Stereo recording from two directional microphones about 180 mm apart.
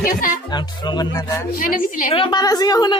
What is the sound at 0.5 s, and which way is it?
Speech, 25° left (ahead or behind).